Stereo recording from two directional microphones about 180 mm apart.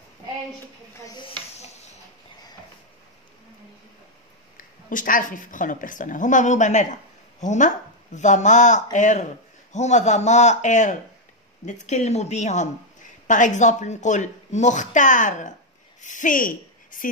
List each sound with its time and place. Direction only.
1.0 s snake: 25° left (ahead or behind)
4.6 s a woman's voice: 50° left (ahead or behind)